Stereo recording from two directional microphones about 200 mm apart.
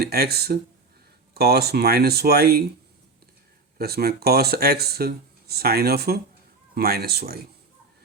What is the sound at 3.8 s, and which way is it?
Speech, 50° right (ahead or behind).